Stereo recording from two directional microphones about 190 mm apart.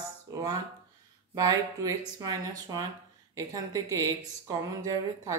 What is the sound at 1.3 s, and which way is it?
A woman's voice, 20° right (ahead or behind).